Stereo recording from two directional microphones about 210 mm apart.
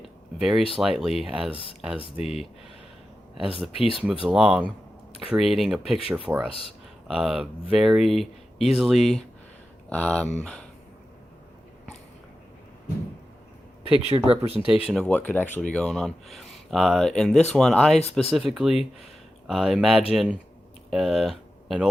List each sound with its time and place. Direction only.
0.3 s speech: centre (ahead or behind)
14.0 s speech: 30° right (ahead or behind)
14.8 s speech: centre (ahead or behind)